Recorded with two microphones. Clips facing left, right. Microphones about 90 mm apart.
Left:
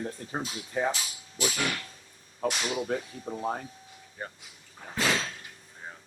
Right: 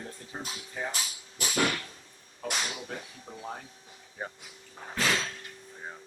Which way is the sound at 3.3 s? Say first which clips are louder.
Left 10 dB; 55° left (ahead or behind).